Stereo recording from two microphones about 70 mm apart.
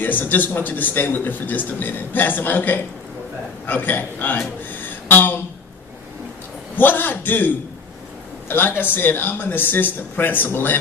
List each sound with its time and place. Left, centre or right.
0.0 s a man's voice: left
4.7 s a sound: left
6.7 s a man's voice: left